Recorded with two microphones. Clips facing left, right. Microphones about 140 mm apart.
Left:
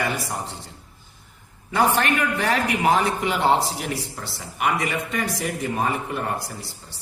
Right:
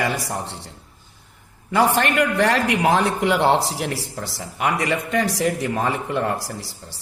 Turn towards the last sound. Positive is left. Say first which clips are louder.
# right 3 dB
turn(degrees=-75)  # may be behind; listen again after turning